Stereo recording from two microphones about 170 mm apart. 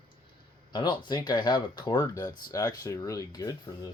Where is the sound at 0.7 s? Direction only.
25° left (ahead or behind).